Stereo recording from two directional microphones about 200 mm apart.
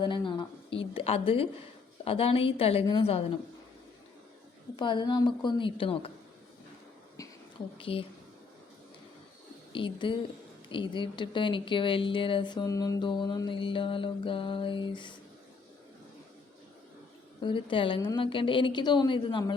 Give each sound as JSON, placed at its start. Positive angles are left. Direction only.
{"t": 0.0, "sound": "speech", "side_deg": 25}
{"t": 4.8, "sound": "speech", "side_deg": 20}
{"t": 7.2, "sound": "a sound", "side_deg": 15}
{"t": 7.8, "sound": "speech", "side_deg": 25}
{"t": 9.7, "sound": "speech", "side_deg": 25}
{"t": 17.4, "sound": "speech", "side_deg": 25}